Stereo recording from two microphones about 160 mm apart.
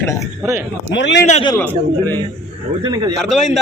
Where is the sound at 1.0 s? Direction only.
90° left.